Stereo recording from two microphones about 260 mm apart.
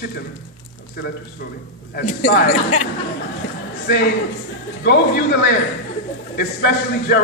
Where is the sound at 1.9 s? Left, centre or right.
Left.